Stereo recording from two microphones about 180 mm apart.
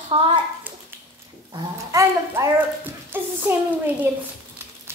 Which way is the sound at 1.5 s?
20° right (ahead or behind).